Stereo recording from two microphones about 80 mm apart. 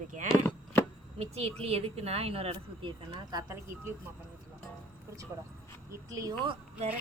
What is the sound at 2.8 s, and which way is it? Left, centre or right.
Speech, right.